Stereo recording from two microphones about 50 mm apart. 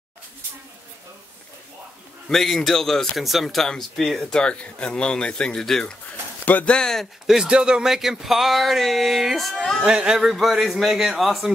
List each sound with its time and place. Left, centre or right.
2.2 s speech: centre
4.3 s speech: centre
7.2 s speech: centre
9.8 s speech: centre